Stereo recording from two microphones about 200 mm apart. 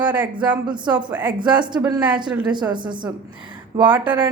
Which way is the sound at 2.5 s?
20° right (ahead or behind).